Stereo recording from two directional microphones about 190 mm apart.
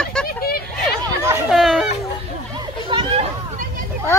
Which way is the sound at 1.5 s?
Centre (ahead or behind).